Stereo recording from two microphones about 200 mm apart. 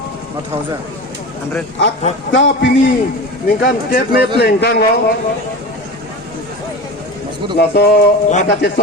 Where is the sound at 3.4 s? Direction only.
50° left (ahead or behind).